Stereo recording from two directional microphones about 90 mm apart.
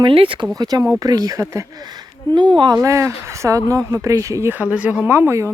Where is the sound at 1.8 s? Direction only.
55° right (ahead or behind).